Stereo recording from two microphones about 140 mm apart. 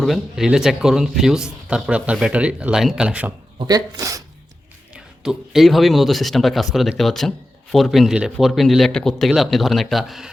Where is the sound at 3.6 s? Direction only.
25° right (ahead or behind).